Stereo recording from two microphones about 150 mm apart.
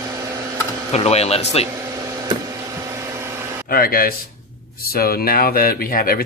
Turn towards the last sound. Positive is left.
turn(degrees=80)